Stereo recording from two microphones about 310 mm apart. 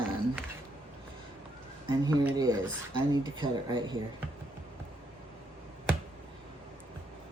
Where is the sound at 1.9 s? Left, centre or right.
Centre.